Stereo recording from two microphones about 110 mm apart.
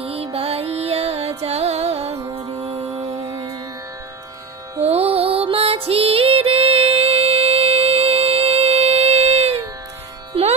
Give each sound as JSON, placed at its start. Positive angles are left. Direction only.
{"t": 0.0, "sound": "music", "side_deg": -65}
{"t": 4.8, "sound": "music", "side_deg": -65}